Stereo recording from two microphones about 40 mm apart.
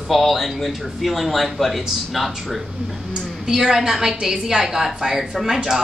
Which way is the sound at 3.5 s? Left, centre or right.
Centre.